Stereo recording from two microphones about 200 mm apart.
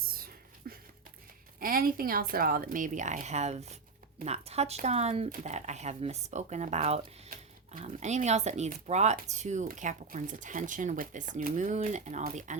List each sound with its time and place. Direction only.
0.0 s whispering: 45° right (ahead or behind)
0.7 s a sound: 50° right (ahead or behind)
1.5 s a woman's voice: 45° right (ahead or behind)